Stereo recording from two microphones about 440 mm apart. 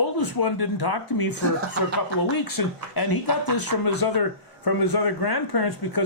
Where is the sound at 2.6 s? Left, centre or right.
Left.